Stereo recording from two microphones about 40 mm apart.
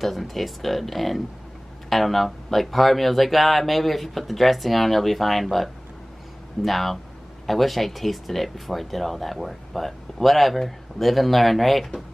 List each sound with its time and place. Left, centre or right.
0.0 s speech: centre